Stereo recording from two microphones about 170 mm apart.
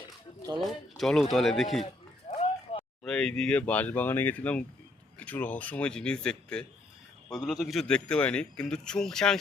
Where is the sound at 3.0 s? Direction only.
5° left (ahead or behind).